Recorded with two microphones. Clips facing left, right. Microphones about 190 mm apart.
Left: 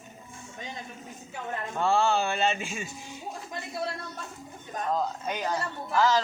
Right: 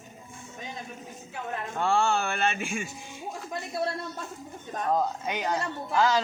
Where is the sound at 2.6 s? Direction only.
55° right (ahead or behind).